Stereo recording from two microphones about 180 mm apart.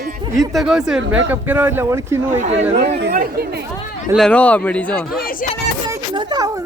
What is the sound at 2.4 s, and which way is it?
Speech, 40° right (ahead or behind).